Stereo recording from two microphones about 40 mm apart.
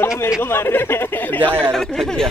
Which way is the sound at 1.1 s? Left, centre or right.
Left.